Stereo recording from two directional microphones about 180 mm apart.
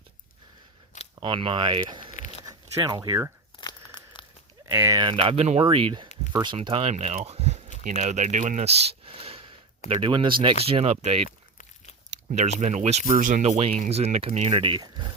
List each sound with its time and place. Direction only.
1.2 s speech: 30° right (ahead or behind)
3.6 s crunch: 25° left (ahead or behind)
4.6 s speech: 15° right (ahead or behind); by 11.2 s 35° right (ahead or behind)
11.3 s a sound: 45° left (ahead or behind)
12.1 s speech: 40° right (ahead or behind); by 15.0 s 25° right (ahead or behind)